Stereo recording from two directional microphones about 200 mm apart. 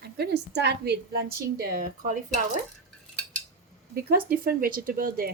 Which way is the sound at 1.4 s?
45° right (ahead or behind).